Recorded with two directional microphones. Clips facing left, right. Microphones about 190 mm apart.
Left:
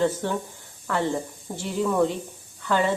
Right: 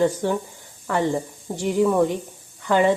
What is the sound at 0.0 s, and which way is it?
A woman's voice, 15° right (ahead or behind).